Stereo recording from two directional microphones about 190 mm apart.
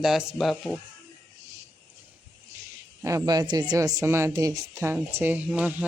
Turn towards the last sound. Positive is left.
turn(degrees=-10)  # may be behind; listen again after turning